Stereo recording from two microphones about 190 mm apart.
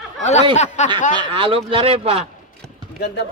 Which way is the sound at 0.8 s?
35° left (ahead or behind).